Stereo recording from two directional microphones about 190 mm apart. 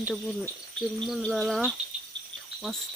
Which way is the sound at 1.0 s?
Centre (ahead or behind).